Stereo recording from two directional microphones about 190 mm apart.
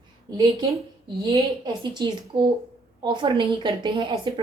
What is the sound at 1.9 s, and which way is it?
Speech, 25° right (ahead or behind).